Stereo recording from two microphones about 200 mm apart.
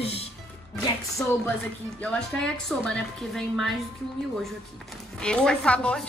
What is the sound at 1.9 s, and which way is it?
A woman's voice, 5° left (ahead or behind).